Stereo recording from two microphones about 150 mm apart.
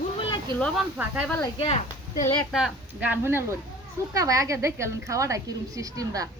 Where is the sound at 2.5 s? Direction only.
5° right (ahead or behind).